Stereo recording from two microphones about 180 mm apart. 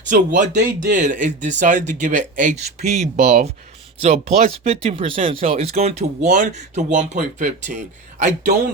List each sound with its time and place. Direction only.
0.0 s speech: 45° right (ahead or behind)